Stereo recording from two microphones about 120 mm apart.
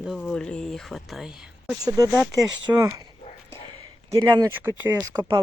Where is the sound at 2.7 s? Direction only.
25° right (ahead or behind).